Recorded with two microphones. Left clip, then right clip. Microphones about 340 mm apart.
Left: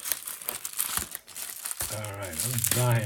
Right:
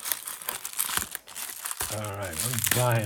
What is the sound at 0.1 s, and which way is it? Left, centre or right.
Crumpling, centre.